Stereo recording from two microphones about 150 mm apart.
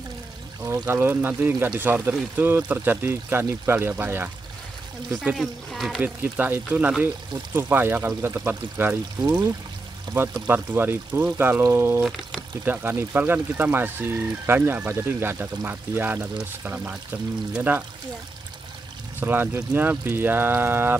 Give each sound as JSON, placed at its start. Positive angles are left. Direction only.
{"t": 0.7, "sound": "speech", "side_deg": -15}
{"t": 5.2, "sound": "speech", "side_deg": 0}
{"t": 6.0, "sound": "speech", "side_deg": -10}
{"t": 10.3, "sound": "speech", "side_deg": -10}
{"t": 19.1, "sound": "speech", "side_deg": -15}